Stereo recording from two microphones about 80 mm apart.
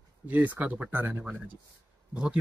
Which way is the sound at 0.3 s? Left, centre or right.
Right.